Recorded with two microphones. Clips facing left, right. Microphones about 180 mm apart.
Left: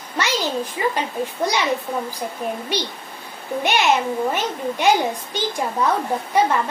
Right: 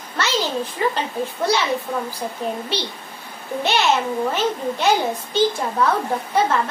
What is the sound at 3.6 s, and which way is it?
A child's voice, 15° left (ahead or behind).